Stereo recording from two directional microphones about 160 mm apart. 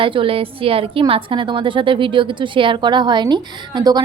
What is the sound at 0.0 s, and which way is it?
A woman's voice, 35° right (ahead or behind).